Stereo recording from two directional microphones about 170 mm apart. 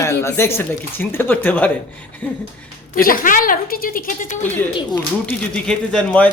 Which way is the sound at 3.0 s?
55° left (ahead or behind).